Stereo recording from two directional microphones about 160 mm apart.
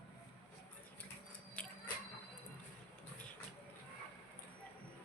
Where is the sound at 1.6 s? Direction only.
5° left (ahead or behind).